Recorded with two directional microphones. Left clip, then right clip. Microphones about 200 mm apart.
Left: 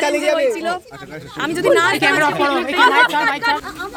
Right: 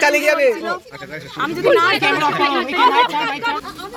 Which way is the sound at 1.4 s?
30° left (ahead or behind).